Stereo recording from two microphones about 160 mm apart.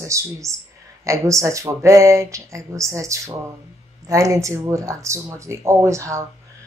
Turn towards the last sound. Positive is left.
turn(degrees=-20)  # may be behind; listen again after turning